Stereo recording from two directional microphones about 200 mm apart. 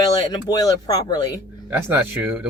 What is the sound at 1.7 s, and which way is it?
Speech, 10° right (ahead or behind).